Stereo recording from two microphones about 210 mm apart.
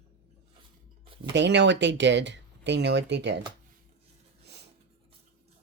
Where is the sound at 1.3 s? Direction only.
55° right (ahead or behind).